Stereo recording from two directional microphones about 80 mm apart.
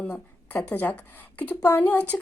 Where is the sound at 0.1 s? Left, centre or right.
Left.